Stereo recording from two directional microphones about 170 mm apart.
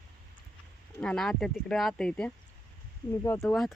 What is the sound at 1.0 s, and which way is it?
Speech, 5° left (ahead or behind).